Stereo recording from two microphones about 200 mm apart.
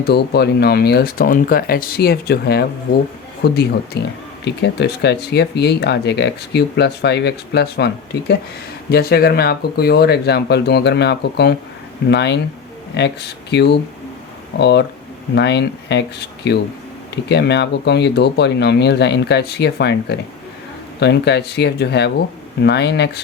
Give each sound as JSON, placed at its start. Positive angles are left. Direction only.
{"t": 0.0, "sound": "speech", "side_deg": 55}
{"t": 8.9, "sound": "speech", "side_deg": 50}